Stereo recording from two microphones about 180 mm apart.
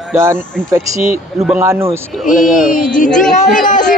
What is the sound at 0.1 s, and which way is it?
A man's voice, 15° right (ahead or behind).